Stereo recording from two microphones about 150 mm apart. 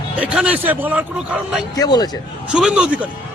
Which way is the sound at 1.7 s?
25° left (ahead or behind).